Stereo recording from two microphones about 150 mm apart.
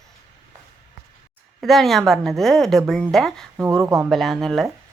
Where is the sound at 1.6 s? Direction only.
Centre (ahead or behind).